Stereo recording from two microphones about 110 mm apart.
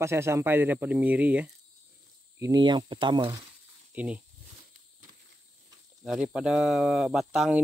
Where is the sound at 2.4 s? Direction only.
40° right (ahead or behind).